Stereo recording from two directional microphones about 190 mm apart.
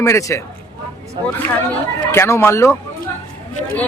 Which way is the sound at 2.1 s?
15° left (ahead or behind).